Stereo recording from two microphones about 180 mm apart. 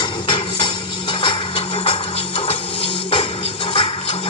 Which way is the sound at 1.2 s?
25° left (ahead or behind).